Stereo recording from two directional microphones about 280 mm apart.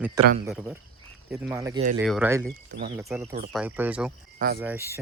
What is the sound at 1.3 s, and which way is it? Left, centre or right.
Speech, centre.